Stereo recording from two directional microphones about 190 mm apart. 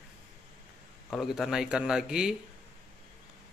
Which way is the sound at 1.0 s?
Centre (ahead or behind).